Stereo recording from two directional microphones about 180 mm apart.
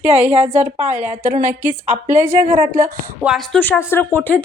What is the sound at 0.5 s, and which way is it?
Speech, 40° right (ahead or behind).